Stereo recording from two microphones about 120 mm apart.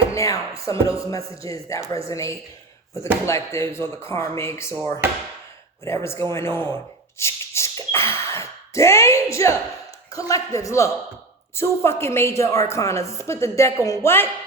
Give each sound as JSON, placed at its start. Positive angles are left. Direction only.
{"t": 0.1, "sound": "a woman's voice", "side_deg": 25}
{"t": 5.8, "sound": "a woman's voice", "side_deg": 20}